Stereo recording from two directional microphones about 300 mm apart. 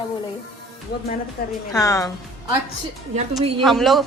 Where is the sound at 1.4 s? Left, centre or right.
Left.